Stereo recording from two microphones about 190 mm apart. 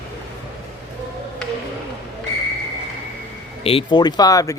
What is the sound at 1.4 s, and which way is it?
Music, 5° left (ahead or behind).